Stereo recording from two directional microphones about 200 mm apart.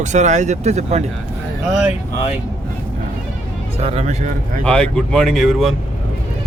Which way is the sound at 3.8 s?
30° right (ahead or behind).